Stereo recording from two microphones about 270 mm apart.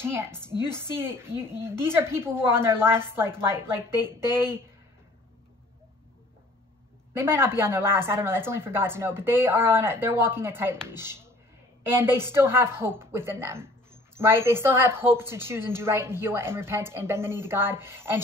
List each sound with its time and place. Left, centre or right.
0.0 s a woman's voice: centre
0.4 s a woman's voice: centre
0.7 s a woman's voice: centre
7.2 s a woman's voice: centre